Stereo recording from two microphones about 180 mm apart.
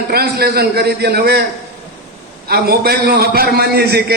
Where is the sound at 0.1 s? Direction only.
60° right (ahead or behind).